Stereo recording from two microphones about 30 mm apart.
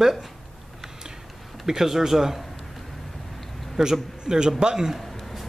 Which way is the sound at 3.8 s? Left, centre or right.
Right.